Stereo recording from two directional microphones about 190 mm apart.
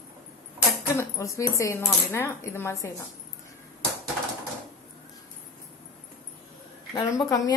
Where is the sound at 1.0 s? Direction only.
15° left (ahead or behind).